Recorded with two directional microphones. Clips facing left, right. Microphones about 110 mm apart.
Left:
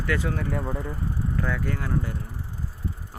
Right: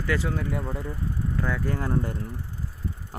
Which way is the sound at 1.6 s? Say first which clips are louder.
Right 2 dB; 30° right (ahead or behind).